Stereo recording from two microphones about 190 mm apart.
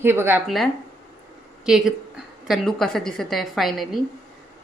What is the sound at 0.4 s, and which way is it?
Speech, centre (ahead or behind).